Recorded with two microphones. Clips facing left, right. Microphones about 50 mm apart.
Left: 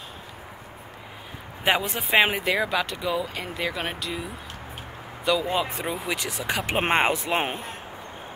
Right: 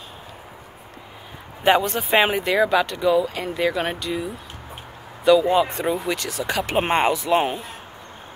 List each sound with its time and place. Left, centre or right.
1.6 s speech: centre
5.2 s speech: centre; by 7.4 s left